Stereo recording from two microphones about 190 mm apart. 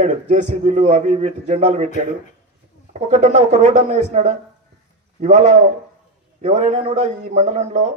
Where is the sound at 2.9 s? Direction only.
40° right (ahead or behind).